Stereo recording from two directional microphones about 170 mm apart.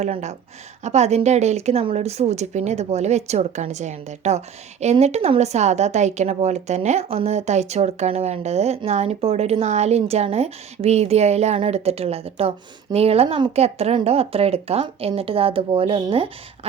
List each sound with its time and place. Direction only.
0.0 s a woman's voice: 40° right (ahead or behind)